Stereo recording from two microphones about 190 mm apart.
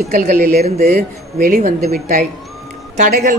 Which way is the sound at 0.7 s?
50° right (ahead or behind).